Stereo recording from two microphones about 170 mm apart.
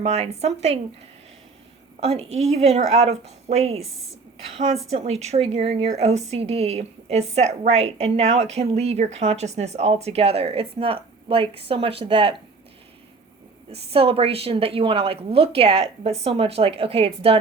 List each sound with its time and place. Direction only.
0.0 s a woman's voice: 40° right (ahead or behind)
2.0 s a woman's voice: 35° right (ahead or behind)
13.7 s a woman's voice: 35° right (ahead or behind)